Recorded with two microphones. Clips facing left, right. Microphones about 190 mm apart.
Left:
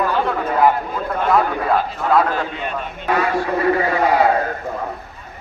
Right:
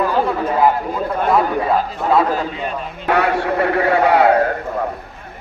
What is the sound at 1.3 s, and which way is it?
Speech, centre (ahead or behind).